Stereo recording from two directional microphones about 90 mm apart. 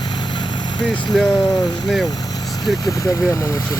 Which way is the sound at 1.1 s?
Centre (ahead or behind).